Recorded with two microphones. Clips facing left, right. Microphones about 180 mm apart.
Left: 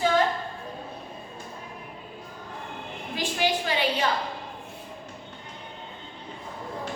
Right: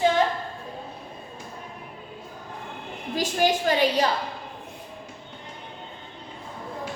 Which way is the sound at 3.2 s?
45° right (ahead or behind).